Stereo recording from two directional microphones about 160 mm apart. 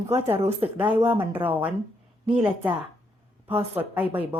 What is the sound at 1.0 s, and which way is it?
A woman's voice, 15° right (ahead or behind).